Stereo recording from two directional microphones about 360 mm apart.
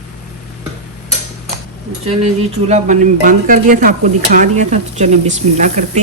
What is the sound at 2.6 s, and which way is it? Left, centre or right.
Speech, centre.